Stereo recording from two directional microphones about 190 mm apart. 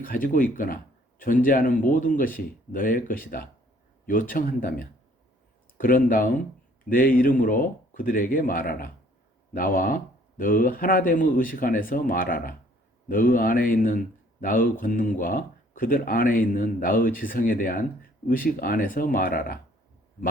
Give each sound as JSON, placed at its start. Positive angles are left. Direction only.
{"t": 0.0, "sound": "speech", "side_deg": 45}